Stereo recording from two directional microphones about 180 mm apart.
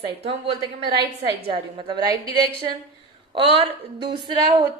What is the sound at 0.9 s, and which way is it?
Speech, 60° right (ahead or behind).